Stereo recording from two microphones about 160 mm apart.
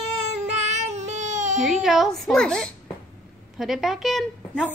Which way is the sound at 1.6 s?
Centre (ahead or behind).